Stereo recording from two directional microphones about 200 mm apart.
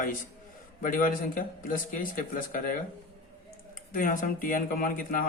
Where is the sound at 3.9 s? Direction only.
45° left (ahead or behind).